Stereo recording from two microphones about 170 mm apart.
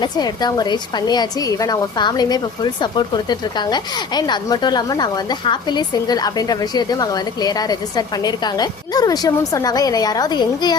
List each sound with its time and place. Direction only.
0.0 s a woman's voice: 25° left (ahead or behind)